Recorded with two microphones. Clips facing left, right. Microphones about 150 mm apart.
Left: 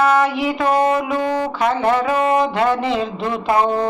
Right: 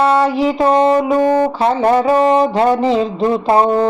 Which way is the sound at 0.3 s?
30° right (ahead or behind).